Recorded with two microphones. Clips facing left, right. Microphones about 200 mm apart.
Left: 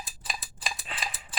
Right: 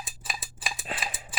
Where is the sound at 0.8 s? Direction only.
45° right (ahead or behind).